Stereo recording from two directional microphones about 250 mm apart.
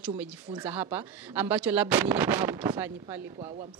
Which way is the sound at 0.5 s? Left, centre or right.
Right.